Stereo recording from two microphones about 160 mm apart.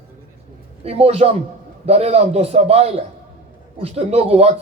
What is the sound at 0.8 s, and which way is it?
A man's voice, 40° right (ahead or behind).